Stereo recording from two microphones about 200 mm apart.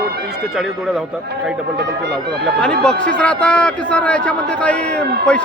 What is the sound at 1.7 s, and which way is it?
Speech, 55° right (ahead or behind).